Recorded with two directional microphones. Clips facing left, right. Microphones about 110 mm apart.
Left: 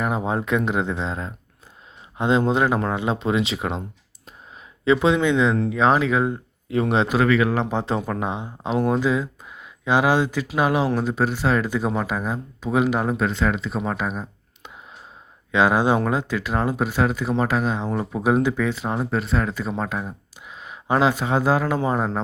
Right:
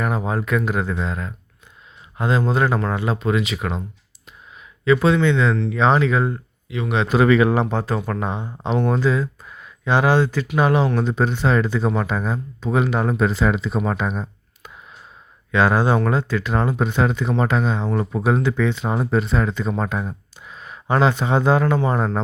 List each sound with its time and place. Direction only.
0.0 s speech: 20° left (ahead or behind)
4.9 s speech: 15° left (ahead or behind)
6.7 s a man's voice: 40° left (ahead or behind)
7.3 s speech: 30° right (ahead or behind)
7.7 s speech: 20° left (ahead or behind); by 14.3 s 5° left (ahead or behind)
15.5 s speech: 15° left (ahead or behind)
20.5 s speech: 15° left (ahead or behind)